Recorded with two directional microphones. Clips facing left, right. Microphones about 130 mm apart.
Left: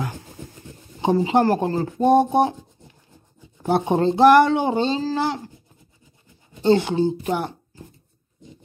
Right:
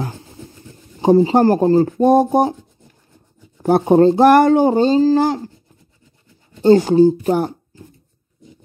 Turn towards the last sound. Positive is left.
turn(degrees=-40)  # may be behind; listen again after turning